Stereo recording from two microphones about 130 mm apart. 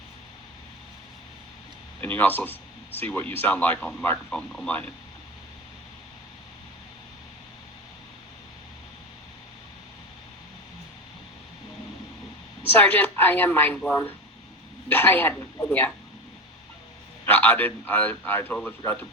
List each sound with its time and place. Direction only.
2.0 s speech: 15° left (ahead or behind)
12.7 s speech: 15° left (ahead or behind)
17.2 s speech: 15° left (ahead or behind)